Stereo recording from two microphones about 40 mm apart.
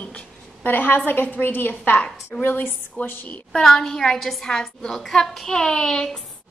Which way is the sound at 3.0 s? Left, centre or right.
Left.